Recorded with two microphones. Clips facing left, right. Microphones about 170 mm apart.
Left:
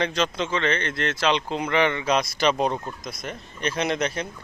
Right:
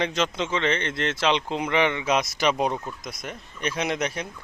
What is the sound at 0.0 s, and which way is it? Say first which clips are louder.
Speech: left 1 dB; 20° right (ahead or behind).